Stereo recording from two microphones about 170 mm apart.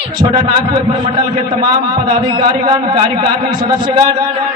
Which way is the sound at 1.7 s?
25° right (ahead or behind).